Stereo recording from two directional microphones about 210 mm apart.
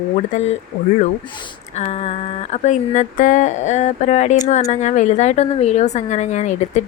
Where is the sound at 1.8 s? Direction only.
30° left (ahead or behind).